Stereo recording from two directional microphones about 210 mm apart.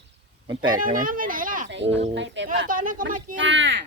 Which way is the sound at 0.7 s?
40° right (ahead or behind).